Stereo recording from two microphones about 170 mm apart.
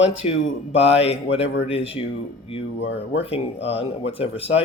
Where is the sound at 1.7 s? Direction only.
35° left (ahead or behind).